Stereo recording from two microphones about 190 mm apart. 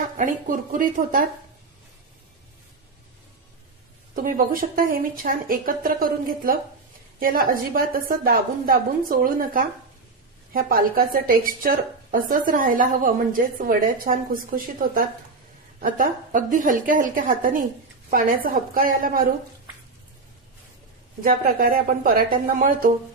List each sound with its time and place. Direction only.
0.2 s a woman's voice: 45° right (ahead or behind)
4.1 s a woman's voice: 45° right (ahead or behind)
21.2 s a woman's voice: 50° right (ahead or behind)